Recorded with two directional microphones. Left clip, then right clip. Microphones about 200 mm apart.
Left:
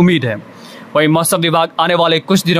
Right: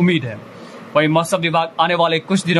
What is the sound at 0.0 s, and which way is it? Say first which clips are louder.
Speech: left 5 dB; 35° left (ahead or behind).